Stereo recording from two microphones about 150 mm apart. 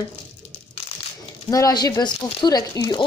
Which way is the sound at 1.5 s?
25° left (ahead or behind).